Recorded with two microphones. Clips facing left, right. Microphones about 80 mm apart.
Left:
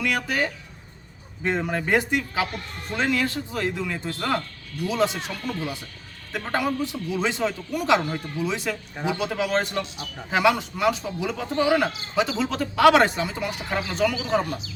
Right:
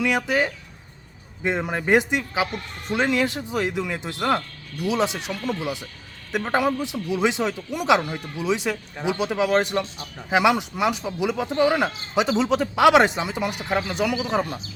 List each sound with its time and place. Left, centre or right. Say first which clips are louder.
0.0 s speech: right 3 dB; centre